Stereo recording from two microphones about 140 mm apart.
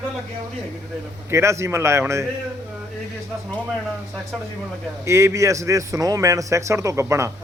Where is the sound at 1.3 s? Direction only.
20° right (ahead or behind).